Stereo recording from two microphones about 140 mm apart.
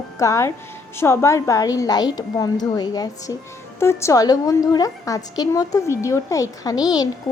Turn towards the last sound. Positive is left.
turn(degrees=30)  # may be behind; listen again after turning